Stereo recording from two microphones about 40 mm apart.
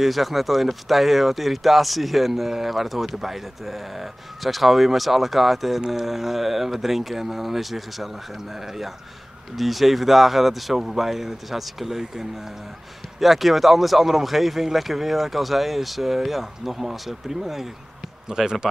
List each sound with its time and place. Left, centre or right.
0.0 s speech: centre